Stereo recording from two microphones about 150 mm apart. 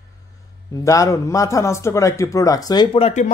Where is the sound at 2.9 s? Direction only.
40° left (ahead or behind).